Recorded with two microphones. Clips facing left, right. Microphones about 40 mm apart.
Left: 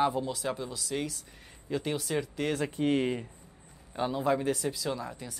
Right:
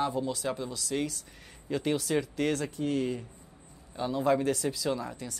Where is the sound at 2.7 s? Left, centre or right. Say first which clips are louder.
Left 2 dB; left.